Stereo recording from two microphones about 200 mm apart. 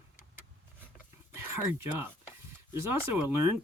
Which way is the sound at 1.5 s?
10° right (ahead or behind).